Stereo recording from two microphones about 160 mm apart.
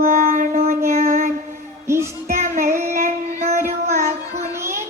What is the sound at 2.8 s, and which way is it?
Female singing, 60° right (ahead or behind).